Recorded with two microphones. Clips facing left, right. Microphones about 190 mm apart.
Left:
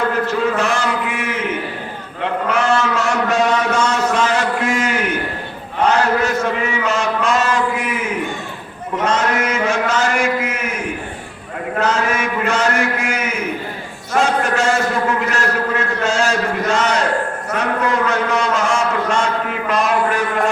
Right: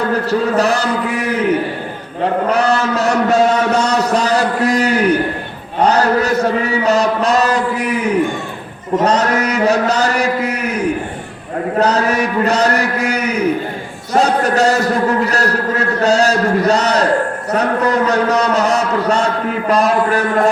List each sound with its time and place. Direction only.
0.1 s a man's voice: 35° right (ahead or behind)
9.0 s a man's voice: 35° right (ahead or behind)
11.8 s a man's voice: 35° right (ahead or behind)